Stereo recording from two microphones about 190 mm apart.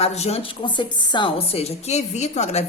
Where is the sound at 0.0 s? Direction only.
35° left (ahead or behind).